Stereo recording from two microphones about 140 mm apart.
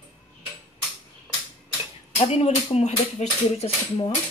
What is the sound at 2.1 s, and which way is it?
Speech, 50° left (ahead or behind).